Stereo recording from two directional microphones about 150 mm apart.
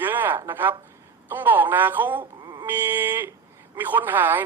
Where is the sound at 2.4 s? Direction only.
30° right (ahead or behind).